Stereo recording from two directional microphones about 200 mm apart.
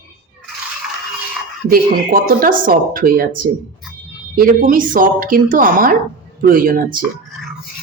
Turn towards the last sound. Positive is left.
turn(degrees=-45)  # may be behind; listen again after turning